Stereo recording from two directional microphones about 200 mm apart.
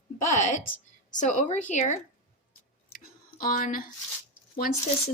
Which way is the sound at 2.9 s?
45° left (ahead or behind).